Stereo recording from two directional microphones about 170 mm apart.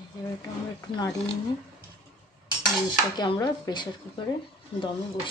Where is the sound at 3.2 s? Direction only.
25° left (ahead or behind).